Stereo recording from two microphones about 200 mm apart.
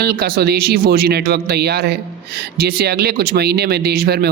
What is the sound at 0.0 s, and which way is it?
A man's voice, 50° right (ahead or behind).